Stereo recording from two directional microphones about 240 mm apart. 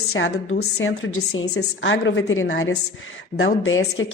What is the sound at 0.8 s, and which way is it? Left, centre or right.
A woman's voice, left.